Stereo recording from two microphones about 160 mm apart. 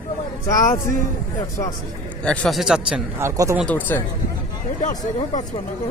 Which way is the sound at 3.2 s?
20° right (ahead or behind).